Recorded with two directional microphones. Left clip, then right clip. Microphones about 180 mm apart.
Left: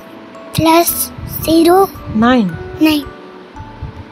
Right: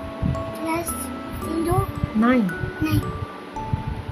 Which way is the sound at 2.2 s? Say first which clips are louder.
Left 8 dB; 40° left (ahead or behind).